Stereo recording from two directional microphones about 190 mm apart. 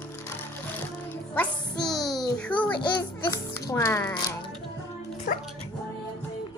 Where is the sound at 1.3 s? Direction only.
5° left (ahead or behind).